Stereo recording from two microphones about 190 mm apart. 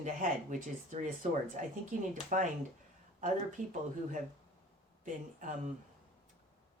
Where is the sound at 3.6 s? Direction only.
45° right (ahead or behind).